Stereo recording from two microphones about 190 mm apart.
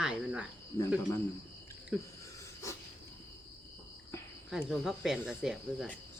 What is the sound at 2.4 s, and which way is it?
Insect, 15° left (ahead or behind).